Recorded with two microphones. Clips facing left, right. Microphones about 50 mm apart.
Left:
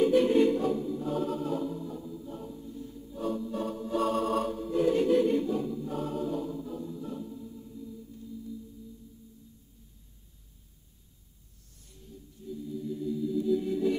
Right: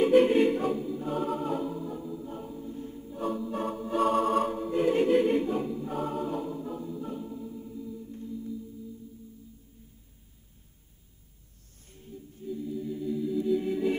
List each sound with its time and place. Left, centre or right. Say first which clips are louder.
0.0 s music: right 2 dB; right
0.7 s choir: even; centre
3.6 s organ: right 3 dB; right
4.1 s organ: right 5 dB; centre
4.6 s choir: right 1 dB; right
7.0 s music: right 2 dB; right
8.0 s music: right 5 dB; right
11.9 s music: right 5 dB; right
12.4 s music: right 2 dB; right